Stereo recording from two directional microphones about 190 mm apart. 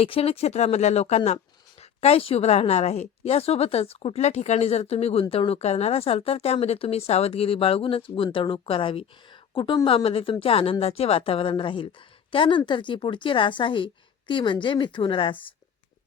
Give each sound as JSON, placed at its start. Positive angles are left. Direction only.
{"t": 0.0, "sound": "a woman's voice", "side_deg": 30}